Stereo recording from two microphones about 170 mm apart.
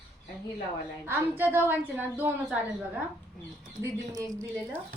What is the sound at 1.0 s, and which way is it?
A woman's voice, 10° right (ahead or behind).